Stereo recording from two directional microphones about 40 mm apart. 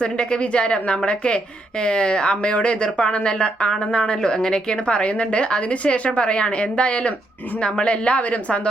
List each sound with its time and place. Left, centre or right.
0.0 s a woman's voice: left